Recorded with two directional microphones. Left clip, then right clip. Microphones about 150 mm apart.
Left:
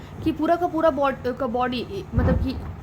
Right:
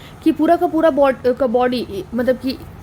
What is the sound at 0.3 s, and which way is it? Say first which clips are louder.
Speech: right 7 dB; 55° right (ahead or behind).